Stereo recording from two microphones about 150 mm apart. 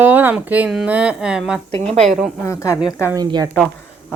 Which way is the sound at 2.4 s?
20° left (ahead or behind).